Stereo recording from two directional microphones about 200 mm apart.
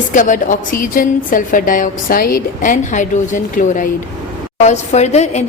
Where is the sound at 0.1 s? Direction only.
40° left (ahead or behind).